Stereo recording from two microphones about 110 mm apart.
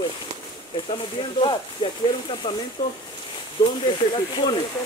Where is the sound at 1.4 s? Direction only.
50° left (ahead or behind).